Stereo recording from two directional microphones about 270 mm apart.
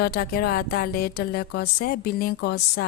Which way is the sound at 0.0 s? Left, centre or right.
Left.